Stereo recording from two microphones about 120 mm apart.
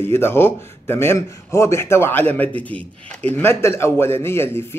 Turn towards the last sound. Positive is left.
turn(degrees=20)  # may be behind; listen again after turning